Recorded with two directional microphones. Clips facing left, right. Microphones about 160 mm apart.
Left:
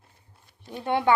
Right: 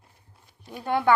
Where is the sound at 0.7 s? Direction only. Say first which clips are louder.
Even; 25° left (ahead or behind).